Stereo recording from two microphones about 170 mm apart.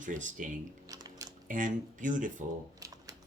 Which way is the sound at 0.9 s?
20° right (ahead or behind).